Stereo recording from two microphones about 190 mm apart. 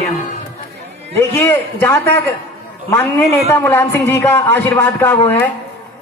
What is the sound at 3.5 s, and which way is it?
A man's voice, 10° left (ahead or behind).